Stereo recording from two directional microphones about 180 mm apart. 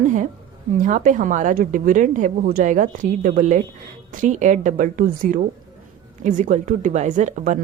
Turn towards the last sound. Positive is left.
turn(degrees=-45)  # may be behind; listen again after turning